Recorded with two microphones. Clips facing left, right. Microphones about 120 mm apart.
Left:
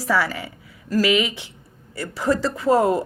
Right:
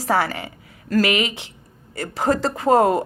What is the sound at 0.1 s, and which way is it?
Speech, 60° right (ahead or behind).